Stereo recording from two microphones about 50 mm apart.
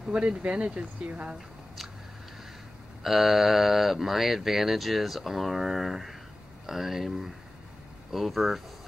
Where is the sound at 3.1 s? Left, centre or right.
Centre.